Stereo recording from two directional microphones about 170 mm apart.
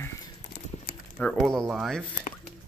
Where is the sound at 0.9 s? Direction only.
60° left (ahead or behind).